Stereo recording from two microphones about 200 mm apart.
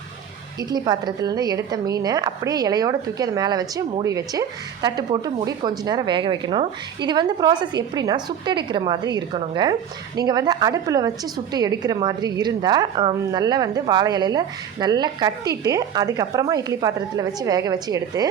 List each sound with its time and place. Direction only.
0.7 s a woman's voice: 20° right (ahead or behind)